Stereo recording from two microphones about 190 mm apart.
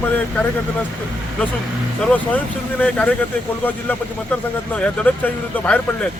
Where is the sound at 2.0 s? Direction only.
5° left (ahead or behind).